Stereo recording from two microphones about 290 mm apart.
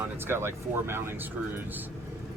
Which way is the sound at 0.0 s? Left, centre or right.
Centre.